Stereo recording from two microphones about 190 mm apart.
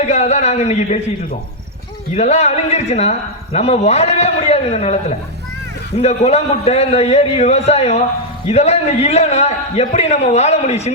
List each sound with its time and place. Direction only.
0.0 s a man's voice: 35° left (ahead or behind)
2.1 s a man's voice: 35° left (ahead or behind)